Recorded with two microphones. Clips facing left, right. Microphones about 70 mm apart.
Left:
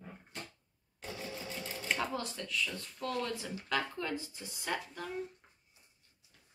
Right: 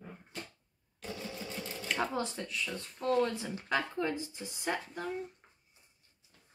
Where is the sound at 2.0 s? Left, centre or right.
Right.